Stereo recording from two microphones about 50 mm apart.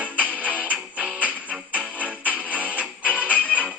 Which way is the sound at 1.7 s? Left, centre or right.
Right.